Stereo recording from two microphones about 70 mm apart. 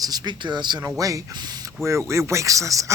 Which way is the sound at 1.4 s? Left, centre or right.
Right.